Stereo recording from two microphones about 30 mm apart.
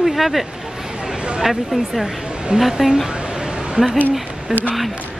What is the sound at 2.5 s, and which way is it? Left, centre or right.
Speech, right.